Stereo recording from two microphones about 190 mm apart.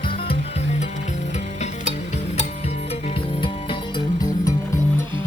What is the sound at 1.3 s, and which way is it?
Stir, 35° left (ahead or behind).